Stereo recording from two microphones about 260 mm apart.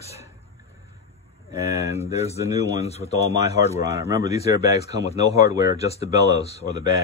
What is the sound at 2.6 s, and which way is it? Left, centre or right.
Speech, left.